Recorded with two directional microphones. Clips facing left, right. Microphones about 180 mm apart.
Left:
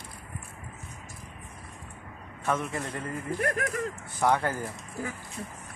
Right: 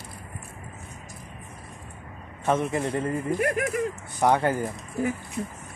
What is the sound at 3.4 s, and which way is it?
Speech, 10° right (ahead or behind).